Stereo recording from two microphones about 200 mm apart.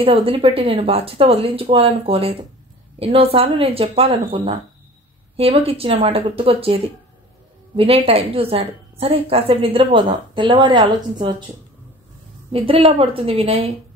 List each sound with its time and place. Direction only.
0.0 s a woman's voice: 30° right (ahead or behind)
12.5 s a woman's voice: 30° right (ahead or behind)